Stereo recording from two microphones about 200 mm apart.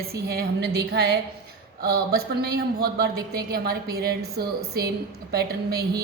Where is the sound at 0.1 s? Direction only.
50° right (ahead or behind).